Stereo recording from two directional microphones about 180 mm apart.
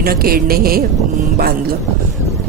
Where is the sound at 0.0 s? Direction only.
55° right (ahead or behind).